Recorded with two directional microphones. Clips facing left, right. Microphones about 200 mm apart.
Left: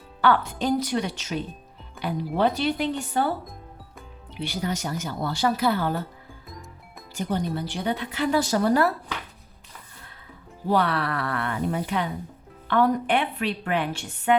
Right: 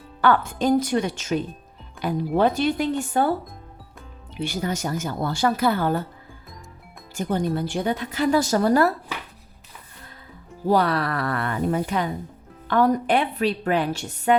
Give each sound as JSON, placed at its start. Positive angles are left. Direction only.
{"t": 0.2, "sound": "speech", "side_deg": -50}
{"t": 4.4, "sound": "speech", "side_deg": -50}
{"t": 7.1, "sound": "speech", "side_deg": -50}
{"t": 10.7, "sound": "a woman's voice", "side_deg": -40}